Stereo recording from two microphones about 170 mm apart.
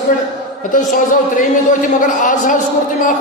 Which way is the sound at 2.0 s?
50° left (ahead or behind).